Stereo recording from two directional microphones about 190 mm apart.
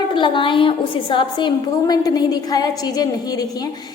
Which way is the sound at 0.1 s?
25° left (ahead or behind).